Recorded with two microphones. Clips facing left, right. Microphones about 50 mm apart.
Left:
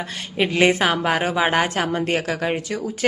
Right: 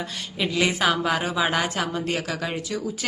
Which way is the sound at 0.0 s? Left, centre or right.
Left.